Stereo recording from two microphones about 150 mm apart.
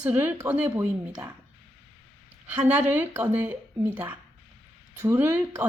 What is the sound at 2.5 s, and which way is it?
Speech, 10° right (ahead or behind).